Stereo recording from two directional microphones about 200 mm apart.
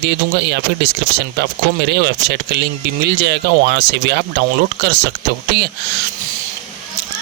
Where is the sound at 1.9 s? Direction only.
55° right (ahead or behind).